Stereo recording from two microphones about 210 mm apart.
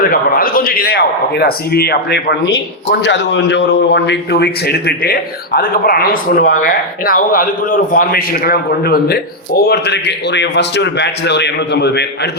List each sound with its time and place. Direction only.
0.0 s a man's voice: 45° left (ahead or behind)